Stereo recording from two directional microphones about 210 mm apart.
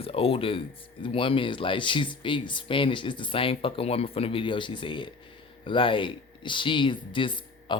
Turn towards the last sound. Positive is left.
turn(degrees=25)  # may be behind; listen again after turning